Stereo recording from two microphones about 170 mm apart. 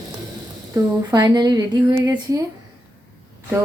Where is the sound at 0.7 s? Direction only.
25° right (ahead or behind).